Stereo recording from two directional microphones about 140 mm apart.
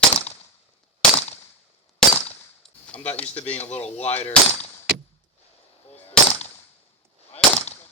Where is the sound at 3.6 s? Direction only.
50° left (ahead or behind).